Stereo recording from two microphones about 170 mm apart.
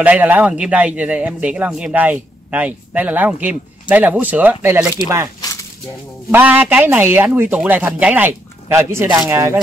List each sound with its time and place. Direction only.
0.0 s a man's voice: 10° right (ahead or behind)
6.3 s a man's voice: 10° right (ahead or behind)